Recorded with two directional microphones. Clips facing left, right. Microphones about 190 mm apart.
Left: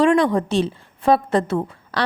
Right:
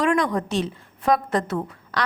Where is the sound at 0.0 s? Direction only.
30° left (ahead or behind).